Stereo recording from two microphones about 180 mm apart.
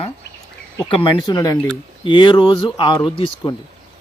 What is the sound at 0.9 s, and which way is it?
Speech, 30° left (ahead or behind).